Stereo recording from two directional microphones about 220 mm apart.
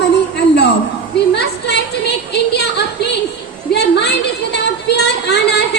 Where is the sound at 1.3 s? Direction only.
50° left (ahead or behind).